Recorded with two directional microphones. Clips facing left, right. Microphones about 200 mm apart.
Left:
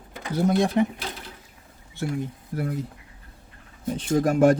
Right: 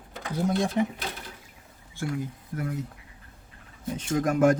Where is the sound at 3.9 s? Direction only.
30° left (ahead or behind).